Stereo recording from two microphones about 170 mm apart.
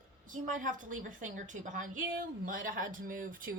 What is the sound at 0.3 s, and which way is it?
A woman's voice, 50° right (ahead or behind).